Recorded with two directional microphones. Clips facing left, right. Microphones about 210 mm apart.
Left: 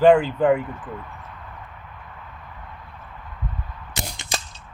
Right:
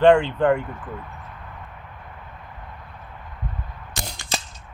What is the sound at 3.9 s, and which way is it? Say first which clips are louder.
Gunshot: left 2 dB; 20° left (ahead or behind).